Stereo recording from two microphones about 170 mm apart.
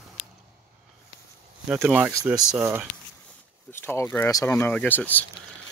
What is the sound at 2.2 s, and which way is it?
Speech, 20° right (ahead or behind).